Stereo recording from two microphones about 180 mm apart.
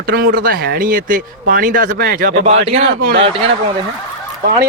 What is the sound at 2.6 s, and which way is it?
Speech, 35° right (ahead or behind).